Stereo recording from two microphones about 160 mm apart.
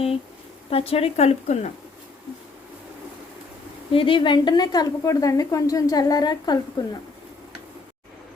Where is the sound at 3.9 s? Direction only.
35° left (ahead or behind).